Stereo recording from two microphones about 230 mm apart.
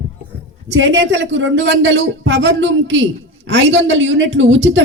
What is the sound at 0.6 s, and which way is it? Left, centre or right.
A woman's voice, right.